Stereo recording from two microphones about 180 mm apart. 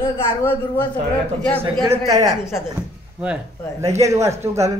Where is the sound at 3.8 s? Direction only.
15° right (ahead or behind).